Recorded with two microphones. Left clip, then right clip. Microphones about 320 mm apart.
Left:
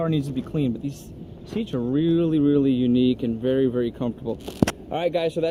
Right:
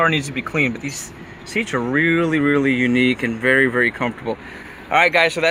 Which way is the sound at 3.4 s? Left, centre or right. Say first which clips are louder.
Right 8 dB; right.